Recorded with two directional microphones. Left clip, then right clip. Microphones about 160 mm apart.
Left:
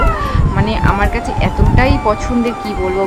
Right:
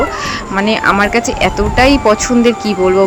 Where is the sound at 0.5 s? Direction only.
20° right (ahead or behind).